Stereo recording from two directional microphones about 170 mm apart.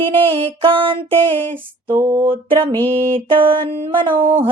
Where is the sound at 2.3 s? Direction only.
30° right (ahead or behind).